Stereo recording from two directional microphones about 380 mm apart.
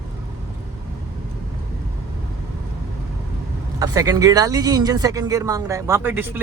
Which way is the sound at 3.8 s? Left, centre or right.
Centre.